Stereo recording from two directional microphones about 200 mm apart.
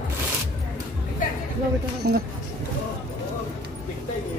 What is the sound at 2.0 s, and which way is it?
Speech, 50° right (ahead or behind).